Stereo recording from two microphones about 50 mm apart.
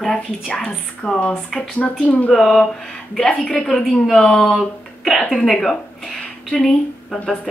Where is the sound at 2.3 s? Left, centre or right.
Centre.